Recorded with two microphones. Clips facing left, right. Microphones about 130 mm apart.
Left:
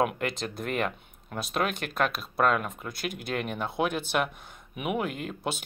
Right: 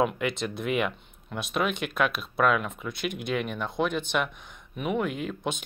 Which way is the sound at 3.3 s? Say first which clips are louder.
Right 2 dB; 50° left (ahead or behind).